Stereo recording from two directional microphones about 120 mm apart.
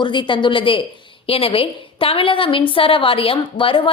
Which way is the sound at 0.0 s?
40° left (ahead or behind).